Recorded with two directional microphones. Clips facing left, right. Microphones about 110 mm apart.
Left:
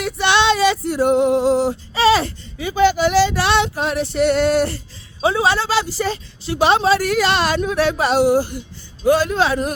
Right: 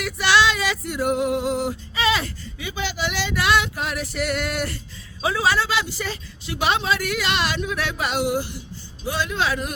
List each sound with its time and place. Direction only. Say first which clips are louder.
0.0 s female singing: left 2 dB; 25° left (ahead or behind)
5.2 s a woman's voice: left 4 dB; 30° left (ahead or behind)